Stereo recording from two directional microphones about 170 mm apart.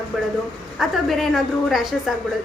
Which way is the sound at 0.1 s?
Centre (ahead or behind).